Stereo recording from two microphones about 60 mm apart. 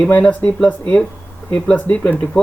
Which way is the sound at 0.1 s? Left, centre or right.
Left.